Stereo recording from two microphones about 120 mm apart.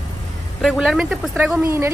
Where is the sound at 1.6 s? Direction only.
20° right (ahead or behind).